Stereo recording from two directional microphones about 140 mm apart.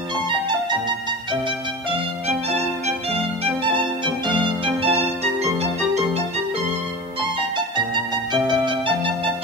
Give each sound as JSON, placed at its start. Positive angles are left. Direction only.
{"t": 0.5, "sound": "music", "side_deg": -35}
{"t": 3.1, "sound": "music", "side_deg": -45}
{"t": 7.5, "sound": "music", "side_deg": -35}